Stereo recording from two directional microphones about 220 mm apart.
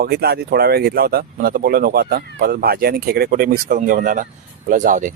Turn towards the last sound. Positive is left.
turn(degrees=-35)  # may be behind; listen again after turning